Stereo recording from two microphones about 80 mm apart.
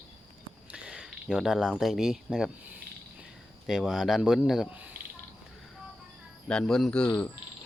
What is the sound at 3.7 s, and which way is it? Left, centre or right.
Speech, centre.